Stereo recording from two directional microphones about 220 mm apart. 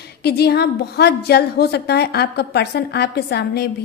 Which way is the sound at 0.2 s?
45° left (ahead or behind).